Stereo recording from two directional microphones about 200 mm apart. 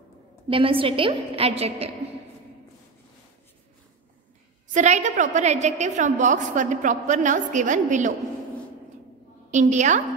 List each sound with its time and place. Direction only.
0.5 s a woman's voice: 25° right (ahead or behind)
4.7 s a woman's voice: 35° right (ahead or behind)
9.5 s a woman's voice: 35° right (ahead or behind)